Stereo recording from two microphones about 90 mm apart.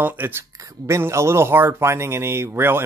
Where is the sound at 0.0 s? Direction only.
25° right (ahead or behind).